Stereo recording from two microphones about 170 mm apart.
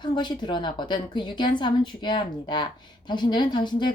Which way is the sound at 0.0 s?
25° left (ahead or behind).